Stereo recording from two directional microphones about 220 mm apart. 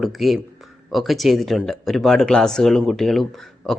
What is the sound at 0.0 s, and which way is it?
Speech, centre (ahead or behind).